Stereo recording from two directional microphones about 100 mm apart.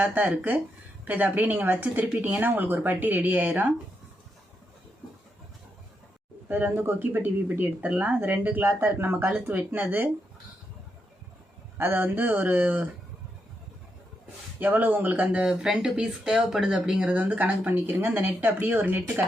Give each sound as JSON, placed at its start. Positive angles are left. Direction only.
{"t": 0.0, "sound": "speech", "side_deg": -15}
{"t": 6.5, "sound": "speech", "side_deg": -20}
{"t": 11.8, "sound": "speech", "side_deg": -20}
{"t": 14.6, "sound": "speech", "side_deg": -20}